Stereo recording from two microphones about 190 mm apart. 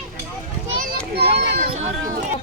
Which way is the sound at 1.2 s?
30° right (ahead or behind).